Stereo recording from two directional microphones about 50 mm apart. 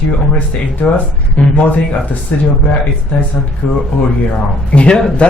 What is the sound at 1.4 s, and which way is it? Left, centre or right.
Speech, left.